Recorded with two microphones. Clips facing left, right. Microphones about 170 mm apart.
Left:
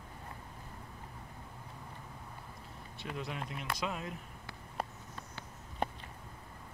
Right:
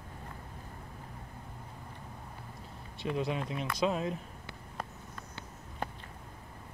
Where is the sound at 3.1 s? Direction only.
25° right (ahead or behind).